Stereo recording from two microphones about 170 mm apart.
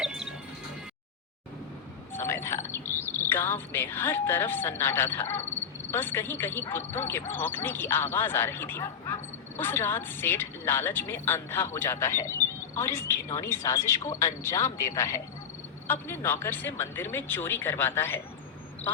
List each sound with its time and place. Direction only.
0.0 s music: 5° right (ahead or behind)
2.1 s speech: 15° left (ahead or behind)